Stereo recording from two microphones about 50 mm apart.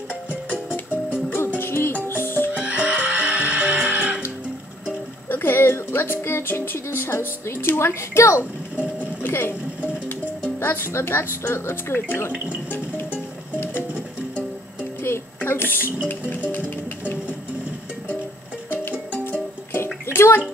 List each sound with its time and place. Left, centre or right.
0.3 s music: right
1.6 s music: left
2.6 s music: right
5.3 s music: left
7.1 s a woman's voice: left
9.2 s music: left
10.6 s a woman's voice: left
15.0 s throat clearing: left
16.1 s music: left
18.7 s music: left
19.7 s bathtub: left